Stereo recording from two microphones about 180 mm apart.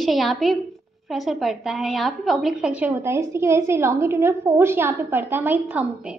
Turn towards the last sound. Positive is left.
turn(degrees=-10)  # may be behind; listen again after turning